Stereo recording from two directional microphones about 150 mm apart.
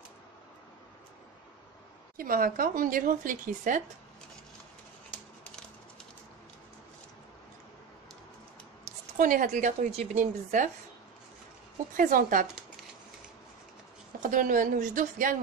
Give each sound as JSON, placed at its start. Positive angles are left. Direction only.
{"t": 2.1, "sound": "speech", "side_deg": -75}
{"t": 8.8, "sound": "speech", "side_deg": -60}
{"t": 12.0, "sound": "a woman's voice", "side_deg": -65}
{"t": 14.2, "sound": "a woman's voice", "side_deg": -60}